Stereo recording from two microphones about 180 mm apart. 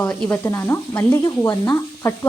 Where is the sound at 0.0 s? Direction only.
10° left (ahead or behind).